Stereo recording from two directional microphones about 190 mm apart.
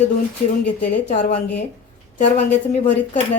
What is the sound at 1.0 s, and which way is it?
Speech, 40° left (ahead or behind).